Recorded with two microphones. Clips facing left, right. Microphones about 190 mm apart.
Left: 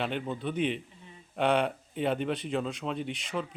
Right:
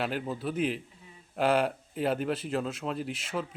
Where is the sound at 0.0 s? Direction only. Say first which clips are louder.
Even; 5° right (ahead or behind).